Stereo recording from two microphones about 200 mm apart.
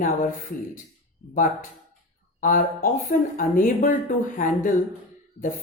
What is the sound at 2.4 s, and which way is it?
Speech, 45° left (ahead or behind).